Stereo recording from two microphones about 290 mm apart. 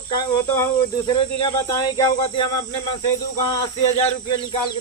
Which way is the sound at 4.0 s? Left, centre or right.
Centre.